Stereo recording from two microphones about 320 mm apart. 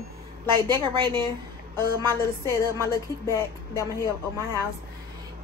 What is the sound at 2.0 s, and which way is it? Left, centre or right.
Speech, centre.